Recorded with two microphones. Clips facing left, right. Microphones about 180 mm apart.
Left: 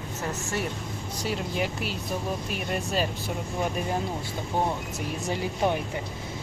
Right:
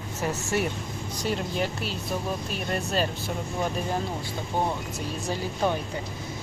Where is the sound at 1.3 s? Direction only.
5° left (ahead or behind).